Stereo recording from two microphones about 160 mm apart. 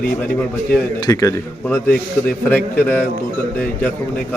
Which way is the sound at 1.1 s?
20° left (ahead or behind).